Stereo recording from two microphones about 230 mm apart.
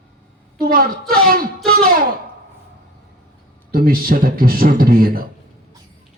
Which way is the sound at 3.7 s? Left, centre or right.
Right.